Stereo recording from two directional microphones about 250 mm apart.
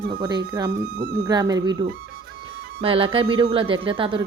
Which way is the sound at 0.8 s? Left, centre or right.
Right.